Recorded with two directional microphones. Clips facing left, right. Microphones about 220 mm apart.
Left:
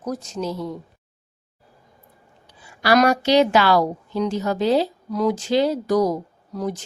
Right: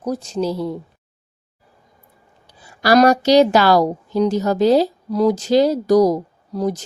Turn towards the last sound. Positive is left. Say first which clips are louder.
# right 5 dB
turn(degrees=-40)  # may be behind; listen again after turning